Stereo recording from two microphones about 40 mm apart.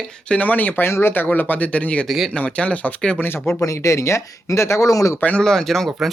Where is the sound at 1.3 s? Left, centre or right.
Left.